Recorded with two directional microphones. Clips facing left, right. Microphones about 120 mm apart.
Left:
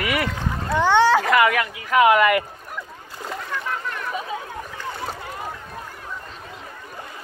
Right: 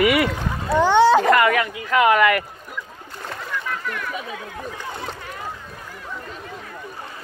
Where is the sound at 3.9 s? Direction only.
30° left (ahead or behind).